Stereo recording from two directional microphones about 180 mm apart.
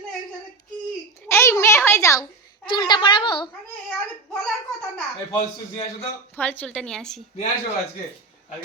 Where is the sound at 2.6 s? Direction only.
25° left (ahead or behind).